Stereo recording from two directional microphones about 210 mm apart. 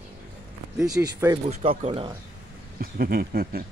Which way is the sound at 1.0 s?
15° right (ahead or behind).